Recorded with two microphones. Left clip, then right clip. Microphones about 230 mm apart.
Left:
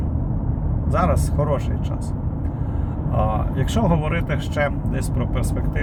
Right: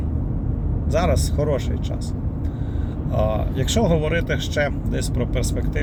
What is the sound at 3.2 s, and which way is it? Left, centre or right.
Speech, left.